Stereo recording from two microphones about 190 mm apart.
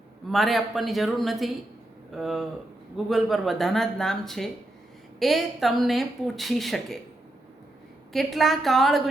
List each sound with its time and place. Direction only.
0.3 s a woman's voice: centre (ahead or behind)
8.1 s a woman's voice: centre (ahead or behind)